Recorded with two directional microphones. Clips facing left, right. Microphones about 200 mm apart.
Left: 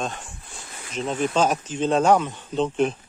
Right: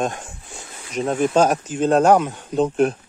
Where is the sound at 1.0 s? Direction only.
10° right (ahead or behind).